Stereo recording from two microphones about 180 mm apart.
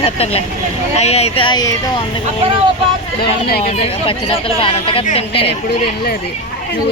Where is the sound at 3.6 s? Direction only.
30° left (ahead or behind).